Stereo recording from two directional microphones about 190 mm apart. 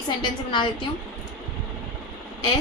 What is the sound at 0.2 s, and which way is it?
Speech, 25° left (ahead or behind).